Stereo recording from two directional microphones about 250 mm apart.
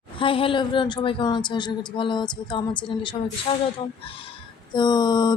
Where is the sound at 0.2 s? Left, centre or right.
Left.